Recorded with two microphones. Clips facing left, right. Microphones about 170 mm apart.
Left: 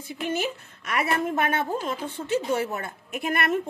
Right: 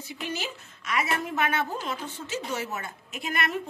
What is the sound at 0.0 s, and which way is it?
A woman's voice, 50° left (ahead or behind).